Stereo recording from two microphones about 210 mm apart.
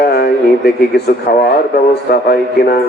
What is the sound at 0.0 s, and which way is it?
A man's voice, 50° left (ahead or behind).